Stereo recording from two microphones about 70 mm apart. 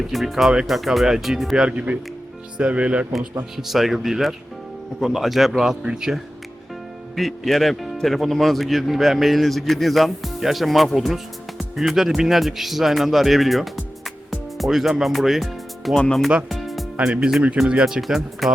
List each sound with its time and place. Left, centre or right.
0.1 s speech: centre
1.6 s speech: centre
3.6 s speech: centre
7.2 s speech: centre
16.0 s speech: centre
16.5 s music: centre
17.1 s speech: centre